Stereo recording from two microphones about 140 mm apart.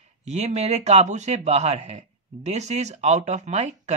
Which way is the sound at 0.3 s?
50° right (ahead or behind).